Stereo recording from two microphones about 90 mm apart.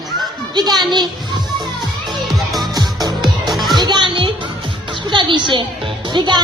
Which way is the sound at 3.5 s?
Centre (ahead or behind).